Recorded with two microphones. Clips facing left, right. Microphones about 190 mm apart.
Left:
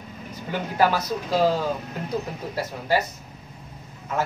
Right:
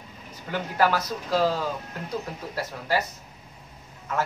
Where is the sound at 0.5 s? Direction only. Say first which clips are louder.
Left 2 dB; 15° left (ahead or behind).